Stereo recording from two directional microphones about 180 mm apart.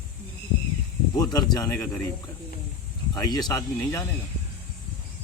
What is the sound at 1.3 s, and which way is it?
Speech, 20° left (ahead or behind).